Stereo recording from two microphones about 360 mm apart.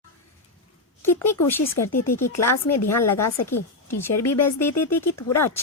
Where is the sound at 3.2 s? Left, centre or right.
Left.